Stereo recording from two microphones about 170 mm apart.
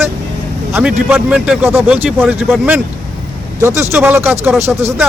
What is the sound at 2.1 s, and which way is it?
Speech, centre (ahead or behind).